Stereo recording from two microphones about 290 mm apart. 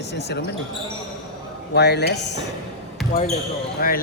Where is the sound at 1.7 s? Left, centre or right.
Left.